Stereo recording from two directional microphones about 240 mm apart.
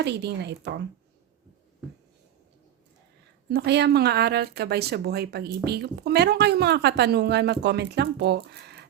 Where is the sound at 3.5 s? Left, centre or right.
Right.